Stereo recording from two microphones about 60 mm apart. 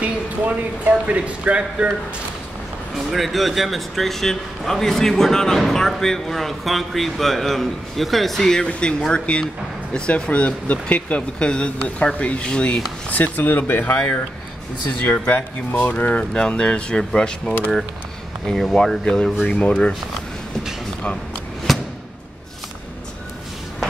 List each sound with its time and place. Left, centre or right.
0.8 s speech: right
3.1 s a man's voice: centre
13.1 s speech: left
13.9 s speech: centre
14.9 s speech: left
18.4 s speech: centre
21.7 s a sound: centre